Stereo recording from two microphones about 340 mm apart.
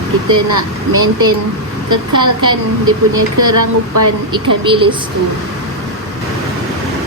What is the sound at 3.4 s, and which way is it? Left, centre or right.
Speech, right.